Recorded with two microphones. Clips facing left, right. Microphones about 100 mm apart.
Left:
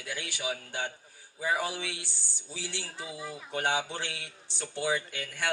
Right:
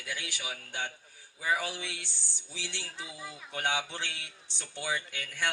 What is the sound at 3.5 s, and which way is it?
Speech, 40° left (ahead or behind).